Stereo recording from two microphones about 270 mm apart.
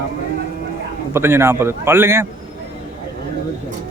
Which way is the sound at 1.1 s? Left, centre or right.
Centre.